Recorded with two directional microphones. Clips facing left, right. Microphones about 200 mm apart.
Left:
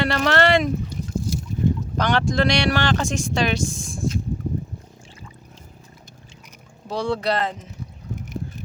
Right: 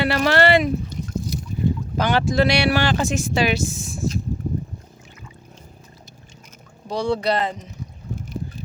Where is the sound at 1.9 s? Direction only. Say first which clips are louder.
Right 4 dB; 5° right (ahead or behind).